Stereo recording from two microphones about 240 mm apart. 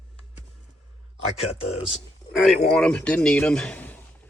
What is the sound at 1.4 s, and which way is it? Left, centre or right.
Speech, left.